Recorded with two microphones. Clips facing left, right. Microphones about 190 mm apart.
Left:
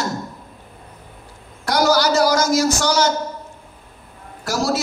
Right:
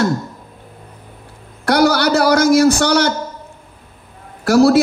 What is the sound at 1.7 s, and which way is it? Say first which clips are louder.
Speech: right 3 dB; 60° right (ahead or behind).